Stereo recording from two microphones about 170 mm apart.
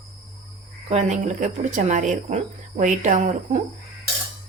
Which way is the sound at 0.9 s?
45° right (ahead or behind).